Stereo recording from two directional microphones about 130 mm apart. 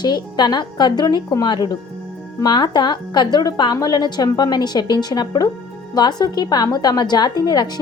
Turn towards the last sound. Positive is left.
turn(degrees=30)  # may be behind; listen again after turning